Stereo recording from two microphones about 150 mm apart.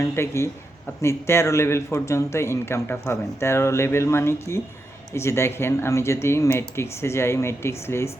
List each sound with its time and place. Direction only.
0.0 s a man's voice: 15° left (ahead or behind)